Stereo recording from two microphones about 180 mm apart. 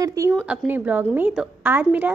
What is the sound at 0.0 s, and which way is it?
A woman's voice, 20° right (ahead or behind).